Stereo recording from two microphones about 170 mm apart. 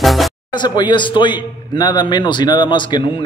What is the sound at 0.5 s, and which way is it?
A man's voice, 25° left (ahead or behind).